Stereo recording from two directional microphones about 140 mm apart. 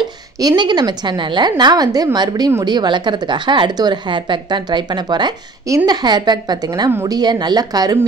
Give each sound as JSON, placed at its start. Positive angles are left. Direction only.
{"t": 0.0, "sound": "a woman's voice", "side_deg": -30}
{"t": 6.9, "sound": "a woman's voice", "side_deg": -20}
{"t": 7.2, "sound": "a woman's voice", "side_deg": -30}